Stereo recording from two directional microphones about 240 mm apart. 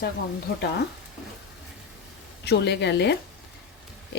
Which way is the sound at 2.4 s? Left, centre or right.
Left.